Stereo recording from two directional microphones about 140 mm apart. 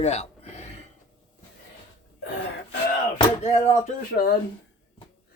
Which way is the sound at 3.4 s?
55° left (ahead or behind).